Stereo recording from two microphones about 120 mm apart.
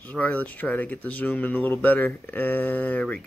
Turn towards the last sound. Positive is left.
turn(degrees=10)  # may be behind; listen again after turning